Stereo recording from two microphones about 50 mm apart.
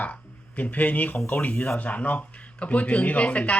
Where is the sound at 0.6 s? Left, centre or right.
Left.